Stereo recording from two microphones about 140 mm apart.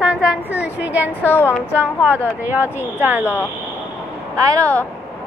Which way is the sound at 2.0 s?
15° right (ahead or behind).